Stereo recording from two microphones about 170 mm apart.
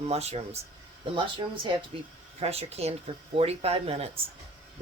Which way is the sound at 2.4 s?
35° right (ahead or behind).